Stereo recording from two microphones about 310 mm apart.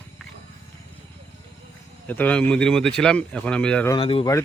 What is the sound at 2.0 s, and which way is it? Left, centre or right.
A man's voice, centre.